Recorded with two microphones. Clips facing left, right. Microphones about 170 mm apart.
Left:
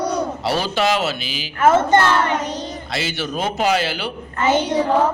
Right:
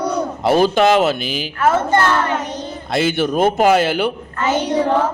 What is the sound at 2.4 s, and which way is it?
Child singing, 20° left (ahead or behind).